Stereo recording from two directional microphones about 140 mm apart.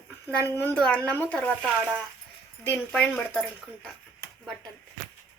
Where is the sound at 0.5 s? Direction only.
10° left (ahead or behind).